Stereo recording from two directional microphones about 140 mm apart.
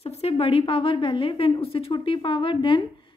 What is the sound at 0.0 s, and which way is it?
A woman's voice, 45° left (ahead or behind).